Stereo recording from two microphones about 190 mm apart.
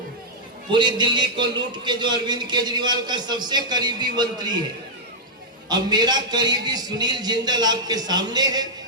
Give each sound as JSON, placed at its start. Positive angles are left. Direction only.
{"t": 0.7, "sound": "a man's voice", "side_deg": -25}
{"t": 5.6, "sound": "a man's voice", "side_deg": -20}